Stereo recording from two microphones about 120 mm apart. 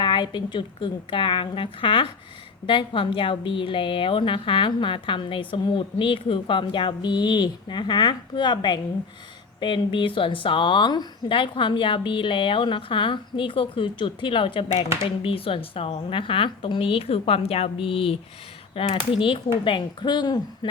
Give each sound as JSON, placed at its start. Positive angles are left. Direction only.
{"t": 0.0, "sound": "a woman's voice", "side_deg": 40}